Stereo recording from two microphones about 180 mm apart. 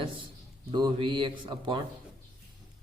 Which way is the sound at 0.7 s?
25° right (ahead or behind).